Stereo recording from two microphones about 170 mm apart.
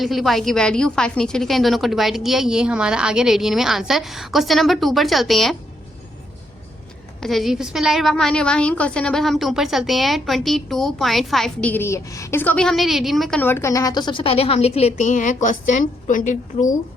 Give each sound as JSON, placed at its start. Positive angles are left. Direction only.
{"t": 0.0, "sound": "a woman's voice", "side_deg": 0}
{"t": 7.2, "sound": "a woman's voice", "side_deg": 0}
{"t": 13.4, "sound": "a woman's voice", "side_deg": 15}